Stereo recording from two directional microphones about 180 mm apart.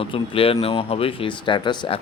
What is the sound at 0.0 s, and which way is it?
Speech, 30° left (ahead or behind).